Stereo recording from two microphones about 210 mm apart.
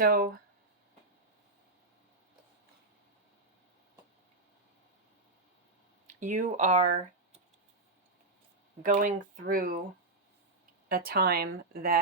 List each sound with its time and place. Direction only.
0.0 s speech: 45° right (ahead or behind)
6.1 s speech: 35° right (ahead or behind)
8.8 s speech: 40° right (ahead or behind)
10.8 s speech: 45° right (ahead or behind)